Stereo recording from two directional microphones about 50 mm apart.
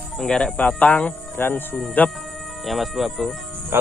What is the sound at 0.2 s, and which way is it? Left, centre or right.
Speech, centre.